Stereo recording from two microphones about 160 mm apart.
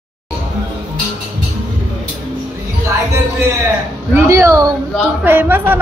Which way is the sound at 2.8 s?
15° right (ahead or behind).